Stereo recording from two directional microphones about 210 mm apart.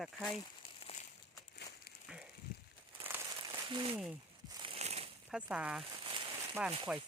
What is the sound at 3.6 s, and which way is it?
Speech, 25° right (ahead or behind).